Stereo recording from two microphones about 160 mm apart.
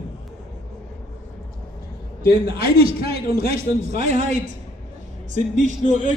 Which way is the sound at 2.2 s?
85° left.